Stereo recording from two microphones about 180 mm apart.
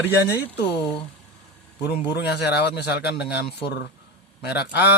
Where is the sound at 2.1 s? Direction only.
70° left (ahead or behind).